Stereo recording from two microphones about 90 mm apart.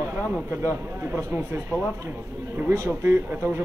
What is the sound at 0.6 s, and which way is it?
Speech, 25° right (ahead or behind).